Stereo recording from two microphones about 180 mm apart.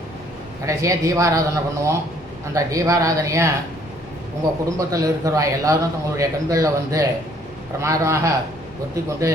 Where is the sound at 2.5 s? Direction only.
20° right (ahead or behind).